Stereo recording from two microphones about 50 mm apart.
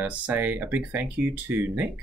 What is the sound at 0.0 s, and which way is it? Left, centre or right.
Speech, right.